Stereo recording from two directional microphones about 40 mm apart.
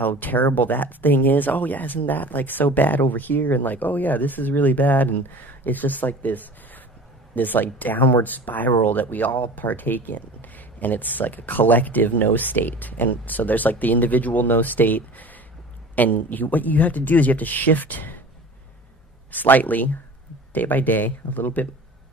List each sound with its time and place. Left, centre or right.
0.0 s speech: left
19.3 s speech: left